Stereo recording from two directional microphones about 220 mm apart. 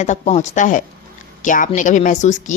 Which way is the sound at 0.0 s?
30° left (ahead or behind).